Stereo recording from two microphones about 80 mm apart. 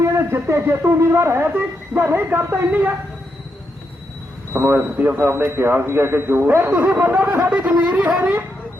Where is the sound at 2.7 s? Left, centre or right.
Centre.